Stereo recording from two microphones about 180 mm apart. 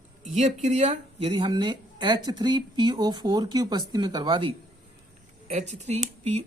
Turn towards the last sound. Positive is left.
turn(degrees=-35)  # may be behind; listen again after turning